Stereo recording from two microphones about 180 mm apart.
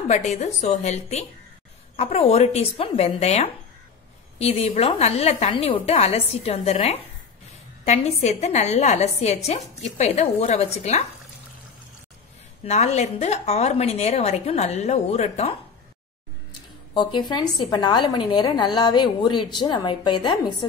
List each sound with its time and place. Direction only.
0.1 s a woman's voice: 40° left (ahead or behind)
12.6 s a woman's voice: 40° left (ahead or behind)
16.9 s a woman's voice: 25° left (ahead or behind)